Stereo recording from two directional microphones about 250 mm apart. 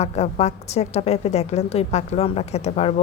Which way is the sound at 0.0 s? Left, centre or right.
Left.